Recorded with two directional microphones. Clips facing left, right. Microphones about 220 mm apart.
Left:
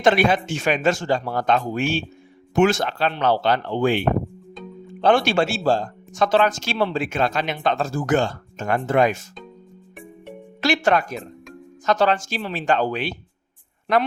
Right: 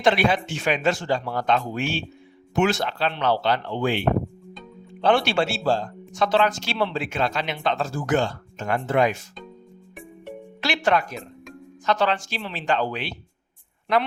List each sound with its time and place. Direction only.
0.0 s speech: 45° left (ahead or behind)
10.6 s speech: 45° left (ahead or behind)